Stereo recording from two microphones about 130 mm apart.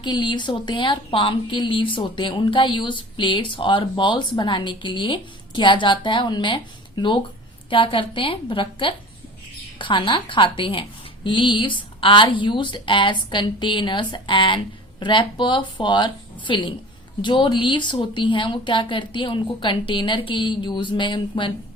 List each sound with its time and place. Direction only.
0.0 s speech: 35° left (ahead or behind)